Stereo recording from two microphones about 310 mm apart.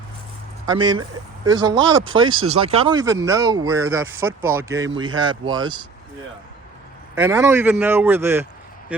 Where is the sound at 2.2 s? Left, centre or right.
Right.